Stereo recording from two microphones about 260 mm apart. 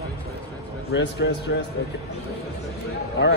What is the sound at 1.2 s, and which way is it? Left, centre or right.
Speech, left.